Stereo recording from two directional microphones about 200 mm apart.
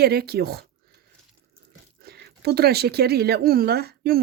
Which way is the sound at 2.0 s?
55° right (ahead or behind).